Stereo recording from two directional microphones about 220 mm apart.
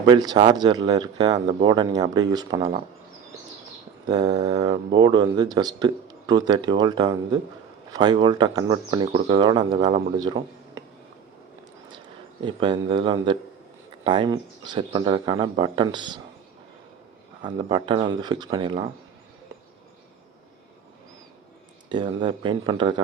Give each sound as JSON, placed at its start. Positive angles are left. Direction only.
{"t": 0.0, "sound": "speech", "side_deg": -20}
{"t": 4.0, "sound": "speech", "side_deg": -20}
{"t": 12.4, "sound": "speech", "side_deg": -20}
{"t": 17.4, "sound": "speech", "side_deg": -20}
{"t": 21.8, "sound": "speech", "side_deg": -20}